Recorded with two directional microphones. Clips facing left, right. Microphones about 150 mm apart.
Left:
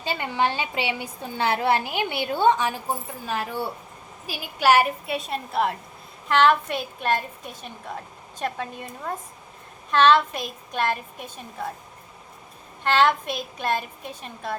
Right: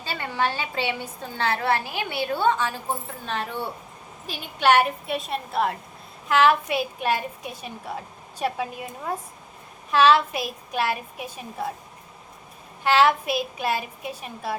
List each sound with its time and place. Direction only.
0.0 s a woman's voice: 20° left (ahead or behind); by 11.7 s 10° right (ahead or behind)
12.8 s a woman's voice: 5° right (ahead or behind)